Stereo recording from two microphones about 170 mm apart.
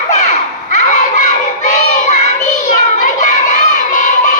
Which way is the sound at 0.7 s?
45° left (ahead or behind).